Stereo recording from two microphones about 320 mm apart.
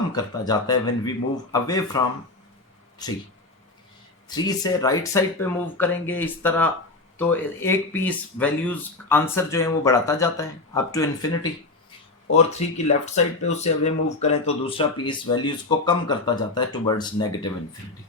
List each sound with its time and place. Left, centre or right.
0.4 s speech: centre
4.3 s speech: centre
12.3 s speech: centre